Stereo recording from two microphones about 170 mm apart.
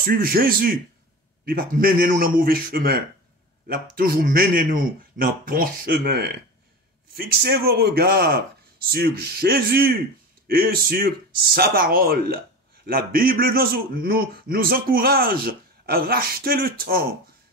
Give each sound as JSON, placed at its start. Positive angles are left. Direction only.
{"t": 0.0, "sound": "a man's voice", "side_deg": -60}